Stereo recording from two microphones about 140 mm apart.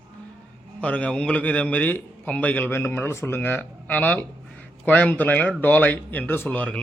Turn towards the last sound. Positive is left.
turn(degrees=10)  # may be behind; listen again after turning